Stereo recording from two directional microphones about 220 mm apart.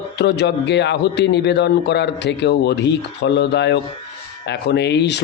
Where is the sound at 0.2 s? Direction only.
50° left (ahead or behind).